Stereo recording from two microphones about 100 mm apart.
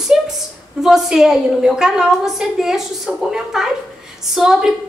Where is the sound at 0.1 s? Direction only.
5° right (ahead or behind).